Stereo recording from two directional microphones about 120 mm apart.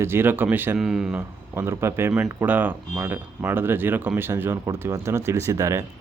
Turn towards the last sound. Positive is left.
turn(degrees=-25)  # may be behind; listen again after turning